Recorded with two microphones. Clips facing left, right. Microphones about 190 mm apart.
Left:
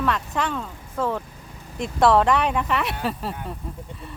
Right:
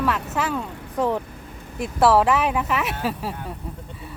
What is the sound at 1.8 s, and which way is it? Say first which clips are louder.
Speech: even; 5° right (ahead or behind).